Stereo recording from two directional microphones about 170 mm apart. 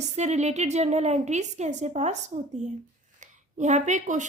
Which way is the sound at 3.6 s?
45° right (ahead or behind).